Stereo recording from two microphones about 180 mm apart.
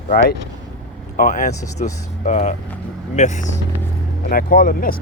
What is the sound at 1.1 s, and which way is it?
Speech, 45° left (ahead or behind).